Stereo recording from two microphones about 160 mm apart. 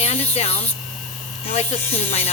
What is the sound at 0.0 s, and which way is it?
Speech, 40° left (ahead or behind).